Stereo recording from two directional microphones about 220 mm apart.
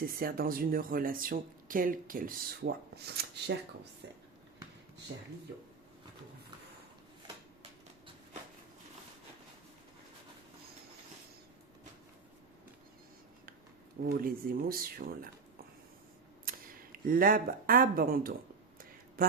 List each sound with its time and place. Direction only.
0.2 s speech: 40° right (ahead or behind)
5.1 s speech: 50° right (ahead or behind)
7.6 s a sound: 25° right (ahead or behind)
14.0 s speech: 40° right (ahead or behind)
16.5 s speech: 40° right (ahead or behind)